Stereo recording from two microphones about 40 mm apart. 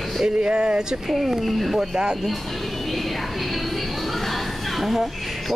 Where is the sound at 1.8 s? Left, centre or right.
Centre.